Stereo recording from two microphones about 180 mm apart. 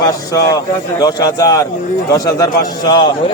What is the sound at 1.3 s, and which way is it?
Speech, 20° left (ahead or behind).